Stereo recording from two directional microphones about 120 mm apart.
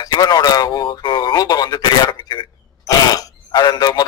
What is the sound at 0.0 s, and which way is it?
Speech, 35° left (ahead or behind).